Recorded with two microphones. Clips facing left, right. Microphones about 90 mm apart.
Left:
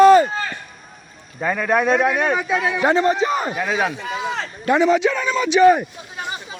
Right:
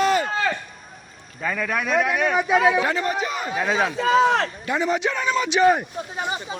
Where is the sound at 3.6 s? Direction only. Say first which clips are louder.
Left 1 dB; centre (ahead or behind).